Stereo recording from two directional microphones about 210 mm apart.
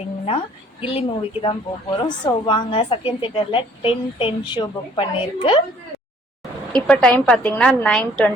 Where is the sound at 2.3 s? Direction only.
20° left (ahead or behind).